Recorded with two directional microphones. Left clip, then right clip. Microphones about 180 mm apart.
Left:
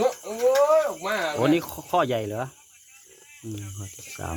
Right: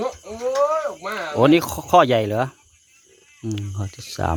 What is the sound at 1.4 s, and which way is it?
Speech, 40° right (ahead or behind).